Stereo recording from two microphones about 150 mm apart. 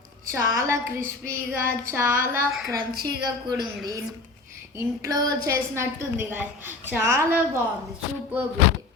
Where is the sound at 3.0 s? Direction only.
30° right (ahead or behind).